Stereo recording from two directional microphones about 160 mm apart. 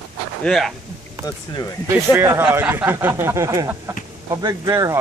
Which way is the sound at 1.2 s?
25° left (ahead or behind).